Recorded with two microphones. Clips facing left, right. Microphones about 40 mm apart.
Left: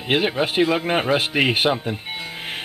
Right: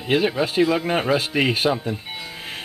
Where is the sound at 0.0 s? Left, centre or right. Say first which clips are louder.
Even; left.